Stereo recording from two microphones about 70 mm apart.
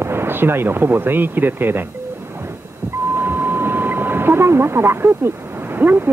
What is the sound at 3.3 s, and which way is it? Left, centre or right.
Speech, right.